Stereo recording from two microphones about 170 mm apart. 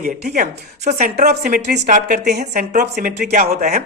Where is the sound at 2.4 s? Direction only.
50° right (ahead or behind).